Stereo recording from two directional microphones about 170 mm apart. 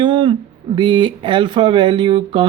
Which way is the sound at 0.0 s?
30° right (ahead or behind).